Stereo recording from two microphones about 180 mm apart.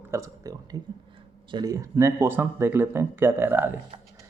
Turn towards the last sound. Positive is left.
turn(degrees=-10)  # may be behind; listen again after turning